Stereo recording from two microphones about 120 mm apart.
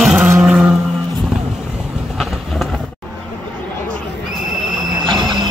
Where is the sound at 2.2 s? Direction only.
Centre (ahead or behind).